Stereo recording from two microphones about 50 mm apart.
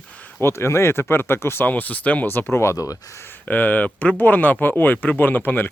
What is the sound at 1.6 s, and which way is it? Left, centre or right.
Speech, left.